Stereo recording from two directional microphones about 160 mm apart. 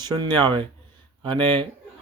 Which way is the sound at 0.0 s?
25° right (ahead or behind).